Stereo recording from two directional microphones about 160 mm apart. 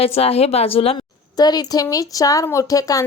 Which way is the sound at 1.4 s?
25° left (ahead or behind).